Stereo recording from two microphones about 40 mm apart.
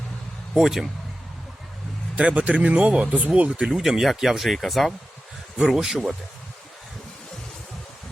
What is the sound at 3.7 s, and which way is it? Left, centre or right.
Speech, centre.